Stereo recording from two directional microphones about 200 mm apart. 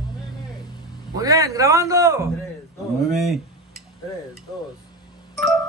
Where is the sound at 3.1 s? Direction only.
Centre (ahead or behind).